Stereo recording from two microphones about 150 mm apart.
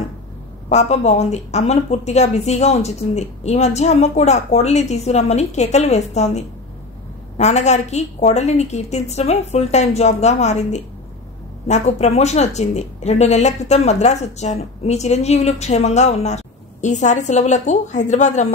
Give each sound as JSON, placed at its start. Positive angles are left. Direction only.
{"t": 0.7, "sound": "speech", "side_deg": 50}